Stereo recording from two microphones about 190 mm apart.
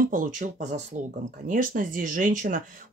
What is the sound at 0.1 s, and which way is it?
Speech, 45° right (ahead or behind).